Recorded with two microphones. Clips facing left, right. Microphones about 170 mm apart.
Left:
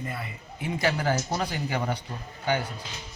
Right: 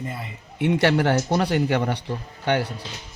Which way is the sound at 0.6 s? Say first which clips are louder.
Right 8 dB; 70° right (ahead or behind).